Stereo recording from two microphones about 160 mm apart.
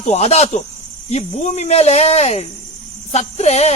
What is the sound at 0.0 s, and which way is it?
A man's voice, 40° left (ahead or behind).